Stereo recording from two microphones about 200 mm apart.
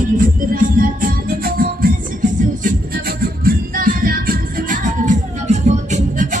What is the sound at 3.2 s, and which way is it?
Music, 45° right (ahead or behind).